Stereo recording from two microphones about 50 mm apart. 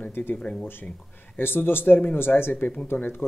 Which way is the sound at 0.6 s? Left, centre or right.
Left.